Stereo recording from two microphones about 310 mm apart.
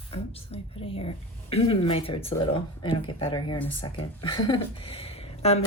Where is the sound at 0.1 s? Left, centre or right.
Centre.